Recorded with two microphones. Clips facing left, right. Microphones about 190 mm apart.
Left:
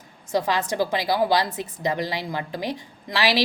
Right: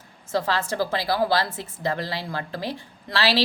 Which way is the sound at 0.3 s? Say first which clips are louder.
Left 1 dB; 15° left (ahead or behind).